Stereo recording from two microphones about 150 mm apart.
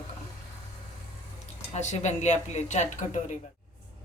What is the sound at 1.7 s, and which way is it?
Speech, 50° left (ahead or behind).